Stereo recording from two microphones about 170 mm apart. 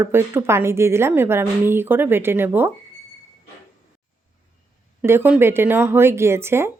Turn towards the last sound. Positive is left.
turn(degrees=-15)  # may be behind; listen again after turning